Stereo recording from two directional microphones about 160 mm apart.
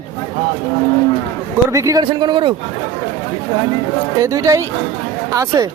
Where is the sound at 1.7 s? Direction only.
20° right (ahead or behind).